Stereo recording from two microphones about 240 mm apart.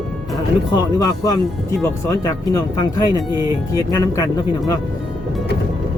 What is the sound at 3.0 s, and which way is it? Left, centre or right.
Speech, centre.